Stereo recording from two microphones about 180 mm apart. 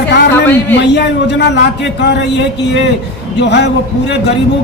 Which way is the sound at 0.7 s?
70° left (ahead or behind).